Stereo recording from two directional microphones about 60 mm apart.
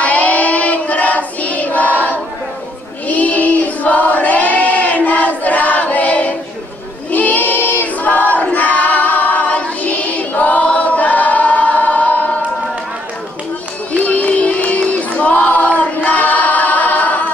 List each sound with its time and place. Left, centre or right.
0.0 s child singing: left
3.1 s choir: left
13.9 s a sound: left